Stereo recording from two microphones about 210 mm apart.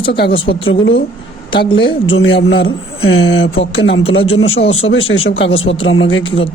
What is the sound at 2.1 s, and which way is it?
A man's voice, 65° left (ahead or behind).